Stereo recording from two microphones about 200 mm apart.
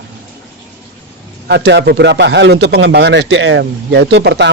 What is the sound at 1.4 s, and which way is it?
A man's voice, 55° right (ahead or behind).